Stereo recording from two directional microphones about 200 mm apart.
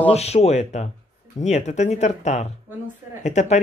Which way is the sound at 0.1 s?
30° left (ahead or behind).